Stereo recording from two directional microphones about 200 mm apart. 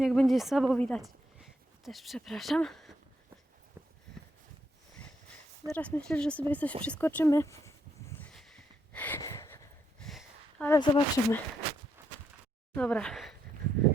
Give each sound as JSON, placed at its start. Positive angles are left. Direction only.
{"t": 0.0, "sound": "speech", "side_deg": 0}
{"t": 5.6, "sound": "speech", "side_deg": 5}
{"t": 8.1, "sound": "a sound", "side_deg": 5}
{"t": 10.0, "sound": "a sound", "side_deg": 0}
{"t": 10.7, "sound": "speech", "side_deg": 15}
{"t": 12.7, "sound": "speech", "side_deg": 5}